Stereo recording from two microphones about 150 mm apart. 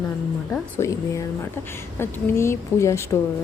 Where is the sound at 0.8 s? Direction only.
20° left (ahead or behind).